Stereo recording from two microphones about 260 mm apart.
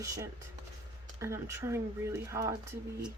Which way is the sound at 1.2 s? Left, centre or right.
Centre.